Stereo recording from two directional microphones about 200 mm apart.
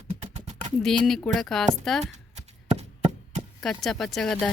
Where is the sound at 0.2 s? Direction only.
35° right (ahead or behind).